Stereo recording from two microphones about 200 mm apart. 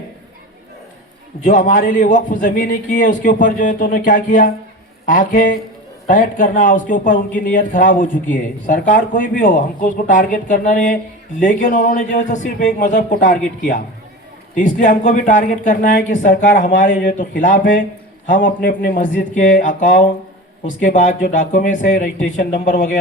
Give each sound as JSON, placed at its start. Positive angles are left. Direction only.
{"t": 1.5, "sound": "speech", "side_deg": 40}